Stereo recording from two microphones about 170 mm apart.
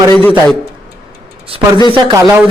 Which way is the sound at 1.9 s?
30° right (ahead or behind).